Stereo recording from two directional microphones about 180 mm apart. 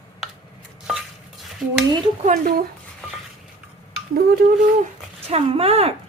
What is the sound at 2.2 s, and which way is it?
Speech, 45° right (ahead or behind).